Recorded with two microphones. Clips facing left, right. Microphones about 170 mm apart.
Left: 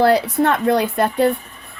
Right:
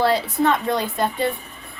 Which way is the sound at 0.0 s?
70° left (ahead or behind).